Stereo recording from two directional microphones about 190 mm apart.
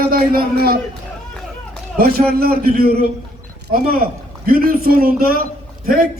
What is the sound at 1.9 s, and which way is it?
Speech, 55° right (ahead or behind).